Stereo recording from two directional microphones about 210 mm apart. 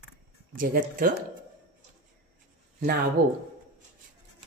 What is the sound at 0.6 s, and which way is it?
Speech, 40° right (ahead or behind).